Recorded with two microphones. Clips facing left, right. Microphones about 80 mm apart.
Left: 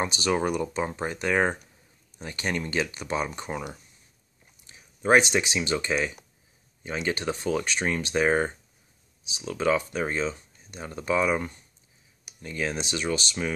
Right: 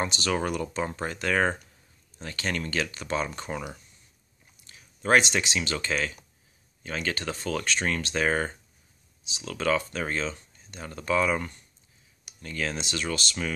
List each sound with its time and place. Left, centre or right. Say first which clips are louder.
0.0 s speech: left 2 dB; centre